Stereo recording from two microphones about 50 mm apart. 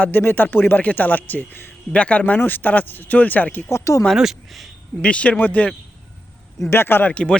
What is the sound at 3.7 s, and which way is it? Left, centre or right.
Speech, left.